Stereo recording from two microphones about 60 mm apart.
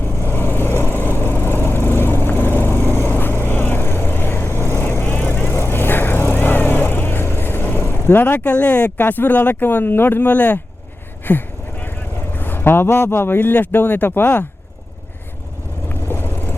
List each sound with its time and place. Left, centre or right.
0.3 s vehicle: left
8.4 s speech: left
11.3 s a sound: left
12.3 s speech: left
15.9 s vehicle: left